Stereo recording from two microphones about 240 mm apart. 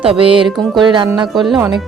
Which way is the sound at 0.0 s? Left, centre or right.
Right.